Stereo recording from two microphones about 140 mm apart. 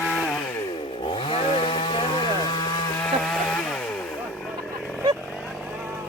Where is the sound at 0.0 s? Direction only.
Centre (ahead or behind).